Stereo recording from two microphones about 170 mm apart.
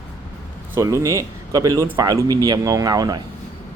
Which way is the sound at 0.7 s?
20° right (ahead or behind).